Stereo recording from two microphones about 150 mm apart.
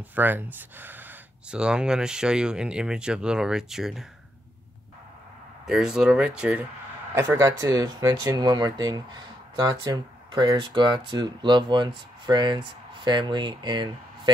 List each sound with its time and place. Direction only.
0.1 s speech: 10° right (ahead or behind)
5.7 s speech: 5° right (ahead or behind)
7.2 s speech: 20° right (ahead or behind)